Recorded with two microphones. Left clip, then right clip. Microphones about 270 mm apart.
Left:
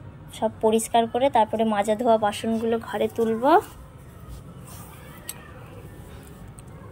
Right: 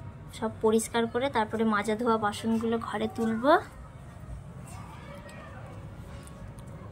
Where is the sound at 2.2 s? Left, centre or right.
Right.